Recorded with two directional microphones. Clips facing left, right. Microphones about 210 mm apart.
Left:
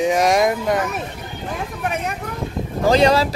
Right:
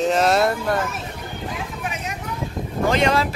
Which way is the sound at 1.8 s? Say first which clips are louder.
Left 5 dB; 55° left (ahead or behind).